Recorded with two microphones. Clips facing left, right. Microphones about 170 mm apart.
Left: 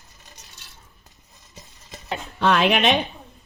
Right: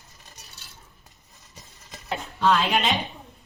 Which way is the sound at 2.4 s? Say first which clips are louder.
Left 3 dB; 70° left (ahead or behind).